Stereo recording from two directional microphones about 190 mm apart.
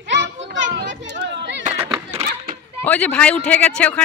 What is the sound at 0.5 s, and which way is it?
Children playing, 70° right (ahead or behind).